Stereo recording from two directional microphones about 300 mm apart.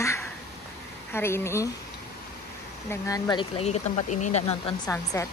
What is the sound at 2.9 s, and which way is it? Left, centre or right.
Speech, centre.